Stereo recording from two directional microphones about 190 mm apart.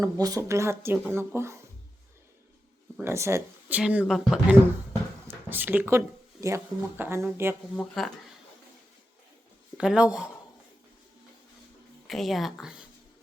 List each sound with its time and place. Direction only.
0.0 s speech: 20° right (ahead or behind)
3.0 s speech: 15° right (ahead or behind)
7.8 s speech: centre (ahead or behind)
9.7 s speech: 5° right (ahead or behind)
12.0 s speech: centre (ahead or behind)